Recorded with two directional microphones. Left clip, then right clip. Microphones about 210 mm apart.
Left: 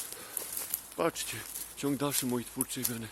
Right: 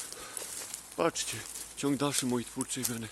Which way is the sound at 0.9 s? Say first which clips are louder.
Right 1 dB; 20° right (ahead or behind).